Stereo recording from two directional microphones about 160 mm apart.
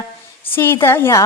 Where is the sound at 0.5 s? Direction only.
15° left (ahead or behind).